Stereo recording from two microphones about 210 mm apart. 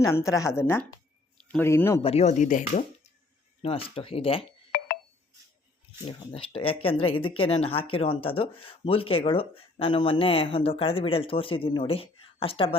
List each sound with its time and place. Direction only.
0.0 s a woman's voice: 15° left (ahead or behind)
2.0 s speech: 30° left (ahead or behind)
6.1 s speech: 25° left (ahead or behind)